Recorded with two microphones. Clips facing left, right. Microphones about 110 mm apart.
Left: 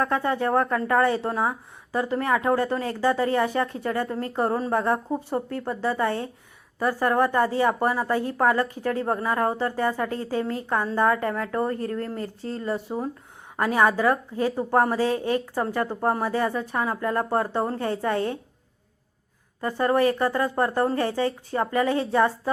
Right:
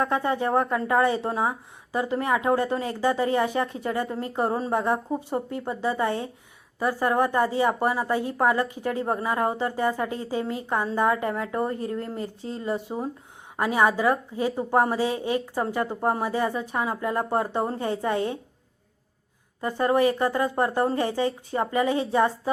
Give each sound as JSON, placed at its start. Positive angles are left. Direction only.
{"t": 0.0, "sound": "a woman's voice", "side_deg": -20}
{"t": 19.6, "sound": "a woman's voice", "side_deg": -15}